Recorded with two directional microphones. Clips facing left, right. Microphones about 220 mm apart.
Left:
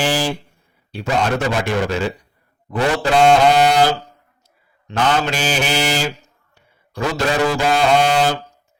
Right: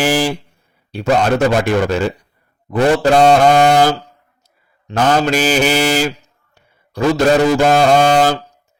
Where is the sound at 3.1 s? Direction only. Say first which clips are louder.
Right 1 dB; 40° right (ahead or behind).